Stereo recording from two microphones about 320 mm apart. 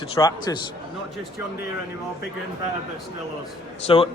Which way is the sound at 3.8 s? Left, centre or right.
Centre.